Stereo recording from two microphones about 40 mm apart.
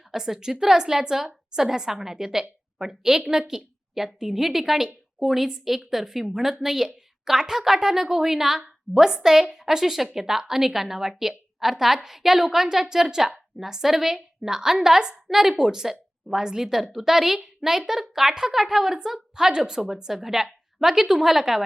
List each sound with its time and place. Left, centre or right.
0.1 s a woman's voice: centre